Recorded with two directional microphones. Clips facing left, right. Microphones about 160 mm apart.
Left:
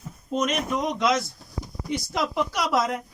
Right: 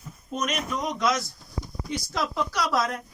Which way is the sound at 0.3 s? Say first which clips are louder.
Left 4 dB; 20° left (ahead or behind).